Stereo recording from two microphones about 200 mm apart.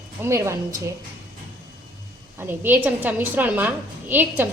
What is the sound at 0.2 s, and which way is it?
Speech, 15° right (ahead or behind).